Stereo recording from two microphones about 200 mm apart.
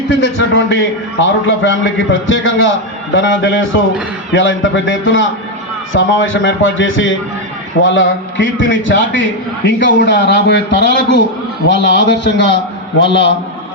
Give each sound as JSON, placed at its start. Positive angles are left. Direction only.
{"t": 0.2, "sound": "a man's voice", "side_deg": 70}